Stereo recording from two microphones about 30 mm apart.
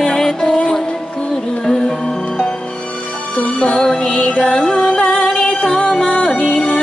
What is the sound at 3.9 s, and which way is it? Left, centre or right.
Music, left.